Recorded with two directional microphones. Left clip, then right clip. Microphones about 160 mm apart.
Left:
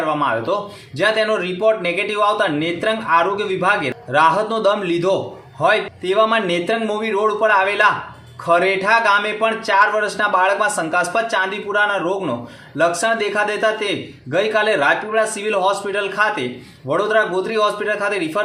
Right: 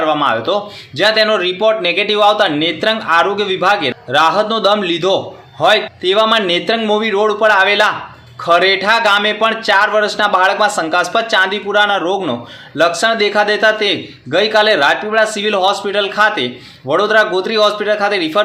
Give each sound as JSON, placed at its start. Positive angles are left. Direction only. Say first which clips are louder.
{"t": 0.0, "sound": "a man's voice", "louder": "right 5 dB", "side_deg": -20}